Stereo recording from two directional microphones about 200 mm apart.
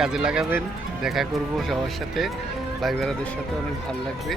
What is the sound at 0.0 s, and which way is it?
Speech, 5° right (ahead or behind).